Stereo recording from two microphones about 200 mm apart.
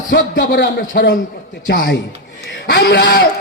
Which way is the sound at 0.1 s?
50° left (ahead or behind).